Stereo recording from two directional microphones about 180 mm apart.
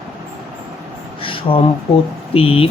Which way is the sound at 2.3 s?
30° left (ahead or behind).